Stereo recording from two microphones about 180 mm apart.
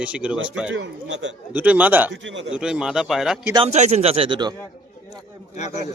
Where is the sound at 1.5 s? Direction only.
10° right (ahead or behind).